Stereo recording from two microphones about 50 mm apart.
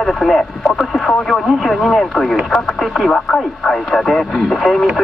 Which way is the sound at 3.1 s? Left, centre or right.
Centre.